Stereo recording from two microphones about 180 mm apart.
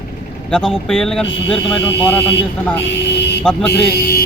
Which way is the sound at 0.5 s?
5° left (ahead or behind).